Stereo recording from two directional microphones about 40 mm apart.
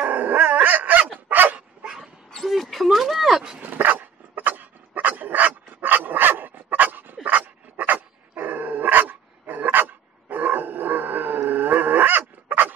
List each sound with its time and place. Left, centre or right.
0.0 s dog: right
2.6 s a sound: centre
3.6 s dog: right